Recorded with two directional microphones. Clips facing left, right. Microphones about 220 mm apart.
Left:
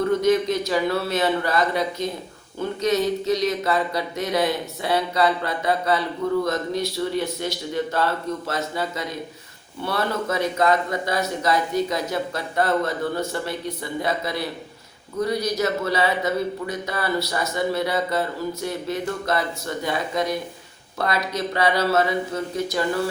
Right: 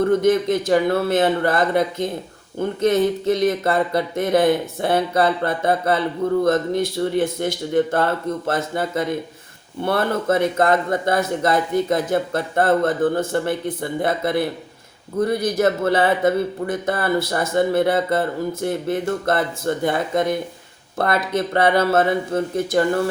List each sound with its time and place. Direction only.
0.2 s speech: 50° right (ahead or behind)